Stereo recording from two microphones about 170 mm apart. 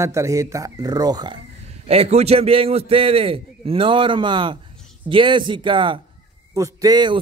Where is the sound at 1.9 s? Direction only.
35° right (ahead or behind).